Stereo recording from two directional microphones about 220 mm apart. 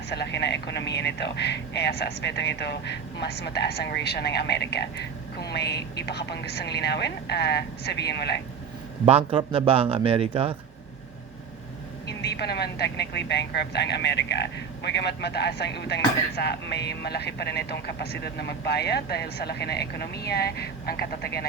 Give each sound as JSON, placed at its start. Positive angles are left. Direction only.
{"t": 0.1, "sound": "a man's voice", "side_deg": 50}
{"t": 9.0, "sound": "speech", "side_deg": -25}
{"t": 12.0, "sound": "a man's voice", "side_deg": 50}